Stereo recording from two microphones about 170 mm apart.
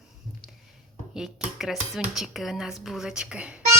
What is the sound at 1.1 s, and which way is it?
A woman's voice, centre (ahead or behind).